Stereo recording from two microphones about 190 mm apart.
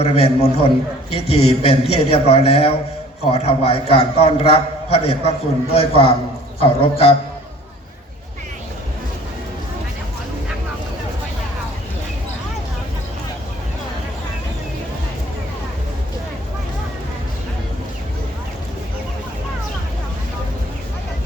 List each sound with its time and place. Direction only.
0.0 s a man's voice: 30° left (ahead or behind)